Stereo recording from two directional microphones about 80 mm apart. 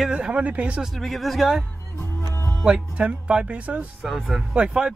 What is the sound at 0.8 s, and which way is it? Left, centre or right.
Speech, centre.